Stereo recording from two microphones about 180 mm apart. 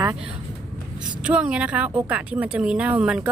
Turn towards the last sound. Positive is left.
turn(degrees=-10)  # may be behind; listen again after turning